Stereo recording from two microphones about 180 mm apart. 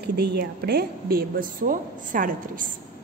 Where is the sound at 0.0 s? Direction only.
65° right (ahead or behind); by 2.7 s 50° right (ahead or behind).